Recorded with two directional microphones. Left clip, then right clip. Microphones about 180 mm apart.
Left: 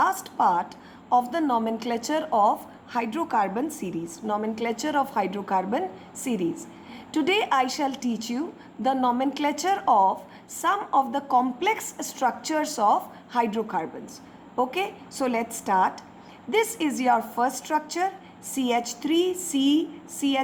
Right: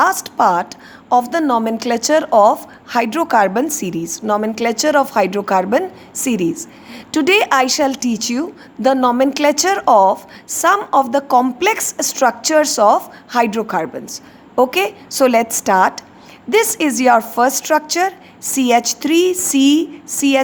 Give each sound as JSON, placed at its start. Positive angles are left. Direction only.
{"t": 0.0, "sound": "a woman's voice", "side_deg": -40}